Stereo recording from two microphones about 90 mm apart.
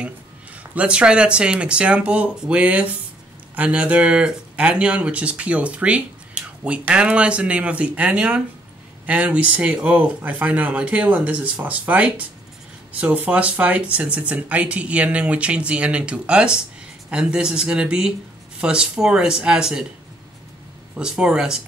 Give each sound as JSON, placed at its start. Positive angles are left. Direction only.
{"t": 0.7, "sound": "speech", "side_deg": -10}
{"t": 20.9, "sound": "speech", "side_deg": -10}